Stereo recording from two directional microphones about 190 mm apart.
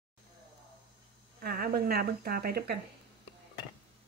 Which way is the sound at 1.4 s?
55° right (ahead or behind).